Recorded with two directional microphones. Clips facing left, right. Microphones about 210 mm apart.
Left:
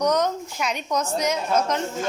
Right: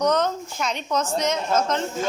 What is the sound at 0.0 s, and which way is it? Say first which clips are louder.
A woman's voice: even; 10° left (ahead or behind).